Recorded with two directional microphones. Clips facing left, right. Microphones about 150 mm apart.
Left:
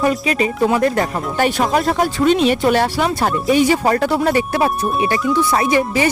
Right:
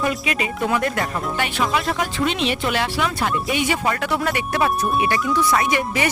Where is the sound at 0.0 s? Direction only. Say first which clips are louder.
Left 6 dB; 35° left (ahead or behind).